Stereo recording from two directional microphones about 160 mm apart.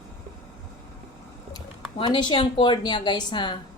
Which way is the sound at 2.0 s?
30° left (ahead or behind).